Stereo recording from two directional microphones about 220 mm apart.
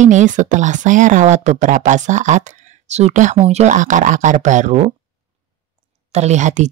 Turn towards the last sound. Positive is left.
turn(degrees=-35)  # may be behind; listen again after turning